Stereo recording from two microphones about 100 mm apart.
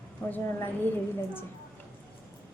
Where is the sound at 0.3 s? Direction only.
20° left (ahead or behind).